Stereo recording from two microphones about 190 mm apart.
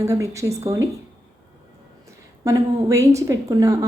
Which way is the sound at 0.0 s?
15° right (ahead or behind).